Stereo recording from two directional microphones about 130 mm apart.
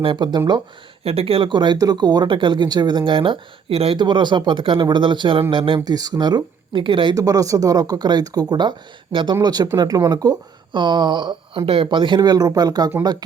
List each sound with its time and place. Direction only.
0.0 s speech: 40° right (ahead or behind)
1.0 s speech: 50° right (ahead or behind)
7.2 s speech: 25° right (ahead or behind)